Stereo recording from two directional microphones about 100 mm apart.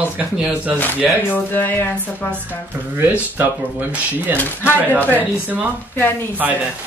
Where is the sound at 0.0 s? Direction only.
10° right (ahead or behind).